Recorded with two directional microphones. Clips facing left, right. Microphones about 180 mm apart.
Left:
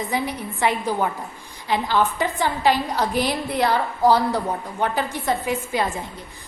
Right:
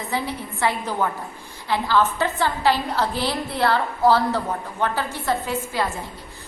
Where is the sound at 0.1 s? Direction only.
15° left (ahead or behind).